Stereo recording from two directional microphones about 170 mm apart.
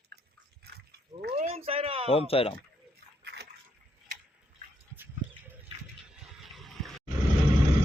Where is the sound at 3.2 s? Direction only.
80° right.